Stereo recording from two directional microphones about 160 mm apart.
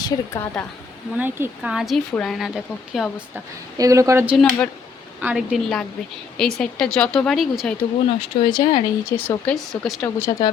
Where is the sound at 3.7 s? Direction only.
20° right (ahead or behind); by 7.7 s centre (ahead or behind).